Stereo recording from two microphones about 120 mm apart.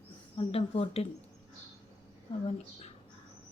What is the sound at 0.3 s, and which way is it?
Speech, 55° left (ahead or behind).